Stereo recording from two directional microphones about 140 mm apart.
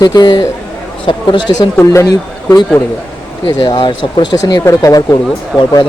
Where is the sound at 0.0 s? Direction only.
30° left (ahead or behind).